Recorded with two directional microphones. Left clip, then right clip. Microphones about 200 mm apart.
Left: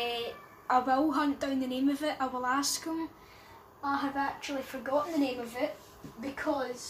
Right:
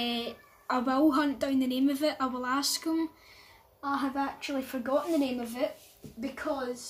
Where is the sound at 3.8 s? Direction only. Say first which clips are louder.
Even; 50° right (ahead or behind).